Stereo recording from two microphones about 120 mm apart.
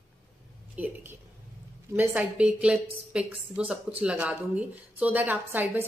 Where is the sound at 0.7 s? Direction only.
15° right (ahead or behind).